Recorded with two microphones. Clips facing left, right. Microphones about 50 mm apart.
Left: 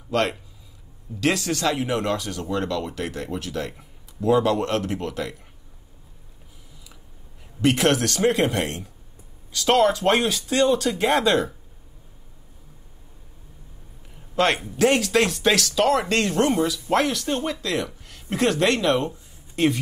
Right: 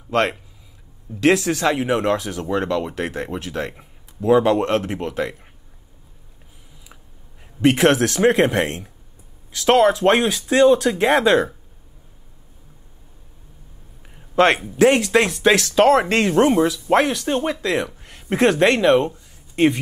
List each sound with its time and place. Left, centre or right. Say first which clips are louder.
0.1 s speech: right 3 dB; right
1.2 s speech: right 6 dB; centre
2.4 s speech: right 3 dB; right
7.6 s speech: right 4 dB; right
14.8 s speech: right 4 dB; centre; by 16.1 s right
16.1 s speech: right 5 dB; right